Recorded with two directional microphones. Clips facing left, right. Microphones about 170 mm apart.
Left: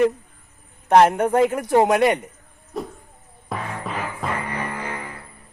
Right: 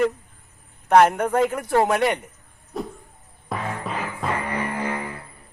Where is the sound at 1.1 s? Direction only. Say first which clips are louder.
Left 3 dB; 30° left (ahead or behind).